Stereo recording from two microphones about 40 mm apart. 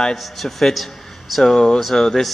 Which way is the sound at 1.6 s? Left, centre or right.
Centre.